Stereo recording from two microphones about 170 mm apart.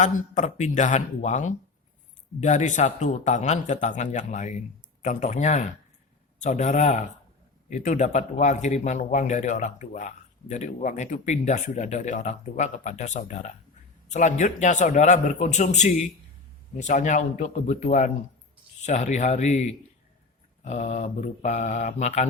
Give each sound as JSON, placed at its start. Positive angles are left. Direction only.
{"t": 0.0, "sound": "speech", "side_deg": 45}
{"t": 20.7, "sound": "speech", "side_deg": 40}